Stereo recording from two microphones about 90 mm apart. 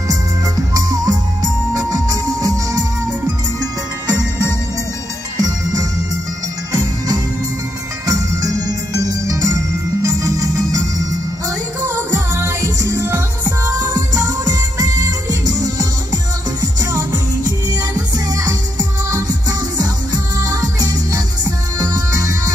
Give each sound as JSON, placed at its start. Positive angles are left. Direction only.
{"t": 0.7, "sound": "music", "side_deg": -45}
{"t": 4.1, "sound": "music", "side_deg": -45}
{"t": 8.1, "sound": "jingle bell", "side_deg": -40}
{"t": 10.0, "sound": "music", "side_deg": -40}
{"t": 13.8, "sound": "music", "side_deg": -40}